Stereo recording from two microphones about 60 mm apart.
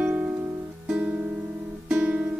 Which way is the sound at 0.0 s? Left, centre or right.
Centre.